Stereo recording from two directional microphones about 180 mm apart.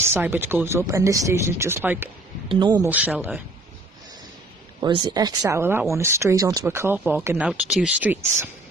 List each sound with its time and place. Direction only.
0.0 s speech: 10° right (ahead or behind)
2.5 s speech: 25° right (ahead or behind)
2.9 s speech: 10° right (ahead or behind)
4.7 s speech: 25° right (ahead or behind)